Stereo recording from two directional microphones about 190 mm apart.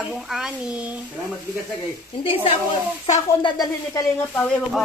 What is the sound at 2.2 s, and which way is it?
Speech, 30° left (ahead or behind).